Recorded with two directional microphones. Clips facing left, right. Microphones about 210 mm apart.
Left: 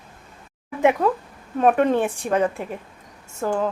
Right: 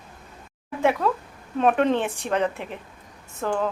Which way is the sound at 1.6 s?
10° left (ahead or behind).